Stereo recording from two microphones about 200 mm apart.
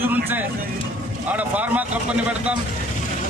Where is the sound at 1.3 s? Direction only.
10° right (ahead or behind).